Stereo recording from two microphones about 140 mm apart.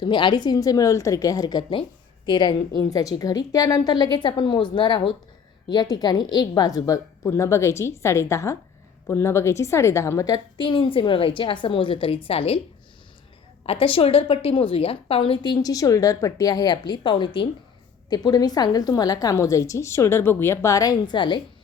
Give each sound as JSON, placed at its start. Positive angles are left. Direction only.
{"t": 0.0, "sound": "a woman's voice", "side_deg": 35}
{"t": 13.7, "sound": "a woman's voice", "side_deg": 40}